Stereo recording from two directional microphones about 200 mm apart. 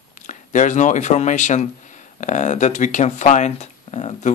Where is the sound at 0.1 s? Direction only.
40° left (ahead or behind).